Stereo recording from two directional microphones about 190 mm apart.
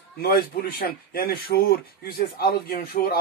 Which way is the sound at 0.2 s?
50° left (ahead or behind).